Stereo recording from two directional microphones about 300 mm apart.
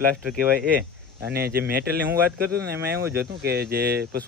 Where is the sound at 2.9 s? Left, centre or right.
Centre.